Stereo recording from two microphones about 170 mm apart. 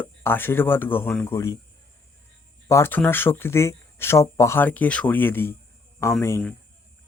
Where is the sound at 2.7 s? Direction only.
15° left (ahead or behind).